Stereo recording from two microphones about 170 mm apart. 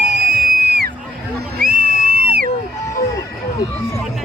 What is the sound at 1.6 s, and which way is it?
Music, 55° right (ahead or behind).